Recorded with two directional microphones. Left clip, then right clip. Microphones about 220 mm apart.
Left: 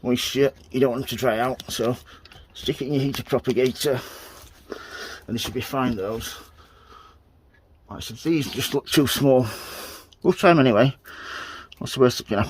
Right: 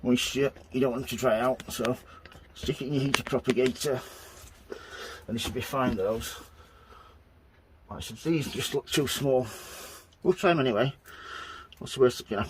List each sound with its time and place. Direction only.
0.3 s speech: 35° left (ahead or behind)
4.7 s a sound: 45° left (ahead or behind)
5.5 s speech: 40° left (ahead or behind)
8.2 s speech: 35° left (ahead or behind)